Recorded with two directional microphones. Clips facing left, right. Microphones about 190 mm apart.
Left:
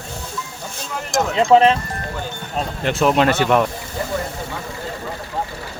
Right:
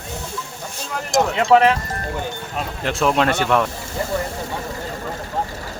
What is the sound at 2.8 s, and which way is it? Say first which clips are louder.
Speech: left 2 dB; centre (ahead or behind).